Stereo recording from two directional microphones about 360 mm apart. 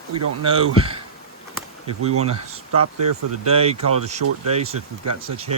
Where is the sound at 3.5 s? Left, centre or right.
Centre.